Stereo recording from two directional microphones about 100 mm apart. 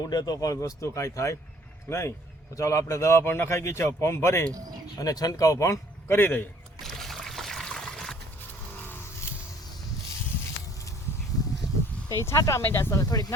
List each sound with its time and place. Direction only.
0.0 s a man's voice: 40° left (ahead or behind)
4.9 s a man's voice: 40° left (ahead or behind); by 6.5 s 20° left (ahead or behind)
6.8 s trickle: 5° left (ahead or behind)
8.4 s vehicle: 20° left (ahead or behind)
12.2 s a man's voice: 30° left (ahead or behind)